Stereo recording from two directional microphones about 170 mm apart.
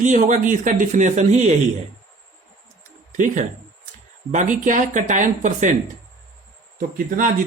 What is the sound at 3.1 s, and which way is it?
Speech, 45° right (ahead or behind).